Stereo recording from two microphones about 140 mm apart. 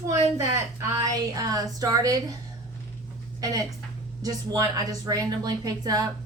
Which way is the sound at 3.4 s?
25° right (ahead or behind).